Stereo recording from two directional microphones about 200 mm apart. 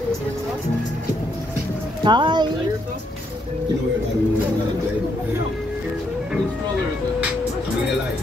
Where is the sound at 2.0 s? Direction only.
20° right (ahead or behind).